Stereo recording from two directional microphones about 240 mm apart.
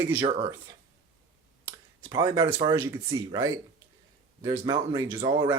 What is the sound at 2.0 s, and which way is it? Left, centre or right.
Speech, centre.